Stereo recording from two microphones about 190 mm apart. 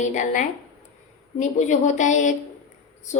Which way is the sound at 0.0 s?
40° left (ahead or behind).